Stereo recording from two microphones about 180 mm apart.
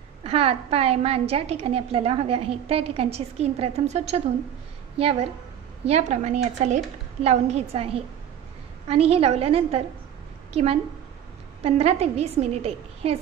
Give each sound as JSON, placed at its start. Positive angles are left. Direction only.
{"t": 0.2, "sound": "a woman's voice", "side_deg": -30}
{"t": 5.9, "sound": "a woman's voice", "side_deg": -40}